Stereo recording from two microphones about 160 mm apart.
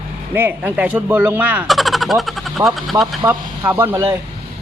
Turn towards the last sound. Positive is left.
turn(degrees=-15)  # may be behind; listen again after turning